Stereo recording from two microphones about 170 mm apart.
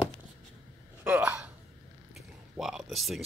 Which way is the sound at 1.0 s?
10° right (ahead or behind).